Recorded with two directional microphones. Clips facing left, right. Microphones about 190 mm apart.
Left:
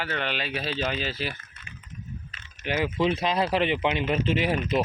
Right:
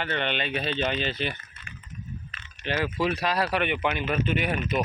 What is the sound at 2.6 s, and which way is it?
Speech, 15° left (ahead or behind).